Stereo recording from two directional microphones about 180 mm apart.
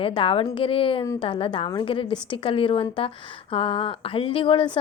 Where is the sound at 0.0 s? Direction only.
30° left (ahead or behind).